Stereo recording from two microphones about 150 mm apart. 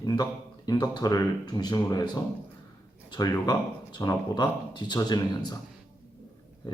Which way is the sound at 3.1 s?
25° left (ahead or behind).